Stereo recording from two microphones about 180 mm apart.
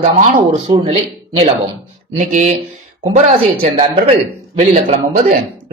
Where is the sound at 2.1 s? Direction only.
40° right (ahead or behind).